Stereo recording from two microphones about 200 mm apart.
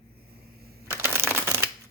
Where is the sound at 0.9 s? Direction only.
10° right (ahead or behind).